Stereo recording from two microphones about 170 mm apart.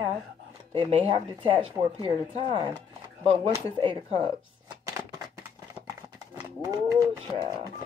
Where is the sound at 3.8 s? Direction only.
30° right (ahead or behind).